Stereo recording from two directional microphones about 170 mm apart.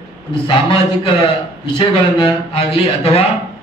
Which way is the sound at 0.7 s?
30° left (ahead or behind).